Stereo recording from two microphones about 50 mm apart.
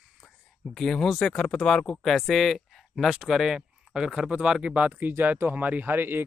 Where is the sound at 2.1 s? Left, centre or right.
Centre; by 4.9 s right.